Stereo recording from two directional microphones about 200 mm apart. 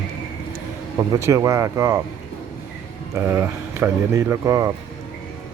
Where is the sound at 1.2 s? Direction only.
15° right (ahead or behind).